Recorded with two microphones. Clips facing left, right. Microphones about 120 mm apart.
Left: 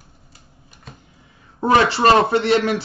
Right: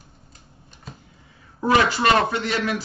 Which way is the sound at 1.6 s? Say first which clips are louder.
Left 3 dB; 30° left (ahead or behind).